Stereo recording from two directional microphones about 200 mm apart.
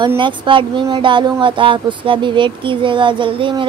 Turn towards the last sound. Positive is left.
turn(degrees=-25)  # may be behind; listen again after turning